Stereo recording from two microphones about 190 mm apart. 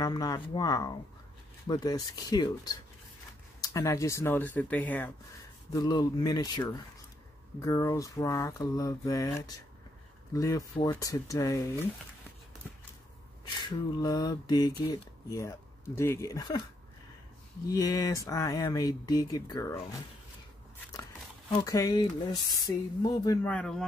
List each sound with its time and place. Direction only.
0.0 s speech: 20° left (ahead or behind)
3.6 s mantra: 15° left (ahead or behind)
5.7 s speech: 20° left (ahead or behind)
7.6 s mantra: 15° left (ahead or behind)
13.6 s speech: 20° left (ahead or behind)
17.6 s speech: 20° left (ahead or behind)
21.6 s speech: 20° left (ahead or behind)
23.4 s speech: 5° left (ahead or behind)